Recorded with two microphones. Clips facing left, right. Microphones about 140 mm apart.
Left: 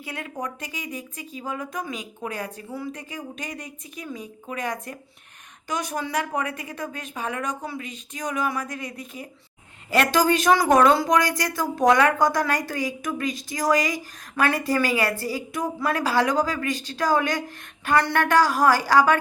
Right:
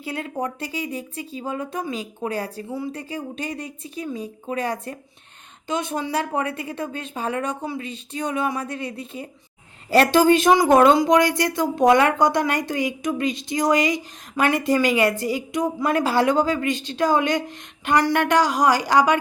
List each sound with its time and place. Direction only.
0.0 s a woman's voice: 30° right (ahead or behind)